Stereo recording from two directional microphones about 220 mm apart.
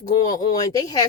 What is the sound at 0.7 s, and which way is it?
Speech, 15° left (ahead or behind).